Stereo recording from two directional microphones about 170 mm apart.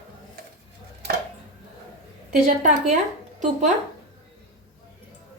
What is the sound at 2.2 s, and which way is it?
Speech, 50° right (ahead or behind).